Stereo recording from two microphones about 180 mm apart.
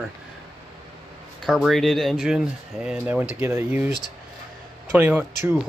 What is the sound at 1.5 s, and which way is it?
Speech, centre (ahead or behind).